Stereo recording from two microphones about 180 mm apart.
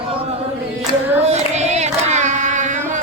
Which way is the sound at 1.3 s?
40° right (ahead or behind).